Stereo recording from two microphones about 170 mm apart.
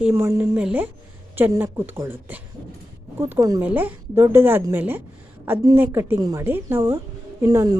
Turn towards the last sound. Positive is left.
turn(degrees=-20)  # may be behind; listen again after turning